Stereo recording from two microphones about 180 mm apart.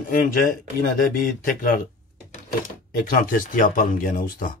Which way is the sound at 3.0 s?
50° left (ahead or behind).